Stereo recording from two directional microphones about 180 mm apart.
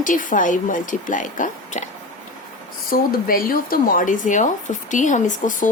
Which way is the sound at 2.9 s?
55° left (ahead or behind).